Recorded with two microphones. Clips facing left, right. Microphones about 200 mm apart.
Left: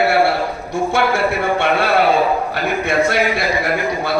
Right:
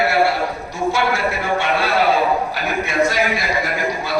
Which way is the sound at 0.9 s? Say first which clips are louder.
Left 2 dB; 55° left (ahead or behind).